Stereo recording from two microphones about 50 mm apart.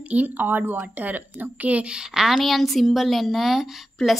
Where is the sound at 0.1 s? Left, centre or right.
Right; by 2.3 s centre.